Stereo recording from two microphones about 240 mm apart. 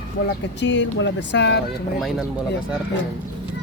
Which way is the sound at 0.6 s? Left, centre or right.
Left.